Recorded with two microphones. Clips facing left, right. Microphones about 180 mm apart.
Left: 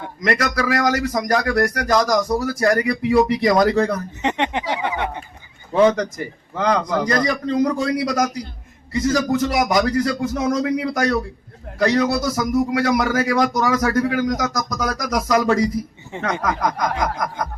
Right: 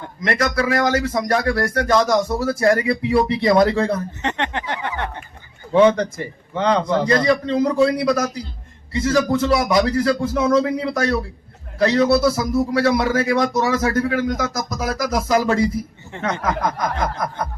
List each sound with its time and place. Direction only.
0.5 s a man's voice: 25° right (ahead or behind)
4.2 s a sound: 15° left (ahead or behind)
5.7 s a man's voice: 30° right (ahead or behind)
16.1 s speech: 15° left (ahead or behind)
16.7 s a man's voice: 30° right (ahead or behind)